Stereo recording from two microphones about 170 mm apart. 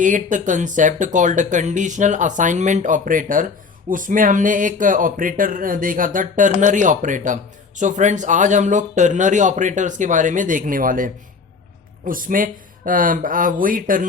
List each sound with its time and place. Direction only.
0.0 s speech: 50° right (ahead or behind)